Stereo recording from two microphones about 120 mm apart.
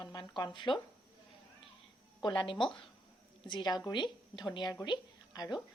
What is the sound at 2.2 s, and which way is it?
A woman's voice, 45° left (ahead or behind).